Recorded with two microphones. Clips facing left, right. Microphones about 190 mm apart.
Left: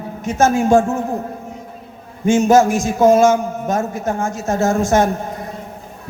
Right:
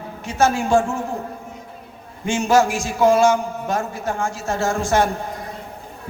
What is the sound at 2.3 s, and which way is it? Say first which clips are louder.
Speech: left 5 dB; 40° left (ahead or behind).